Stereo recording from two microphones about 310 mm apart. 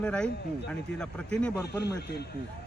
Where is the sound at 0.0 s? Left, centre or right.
Centre.